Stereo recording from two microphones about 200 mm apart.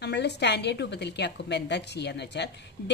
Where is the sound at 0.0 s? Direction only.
55° left (ahead or behind).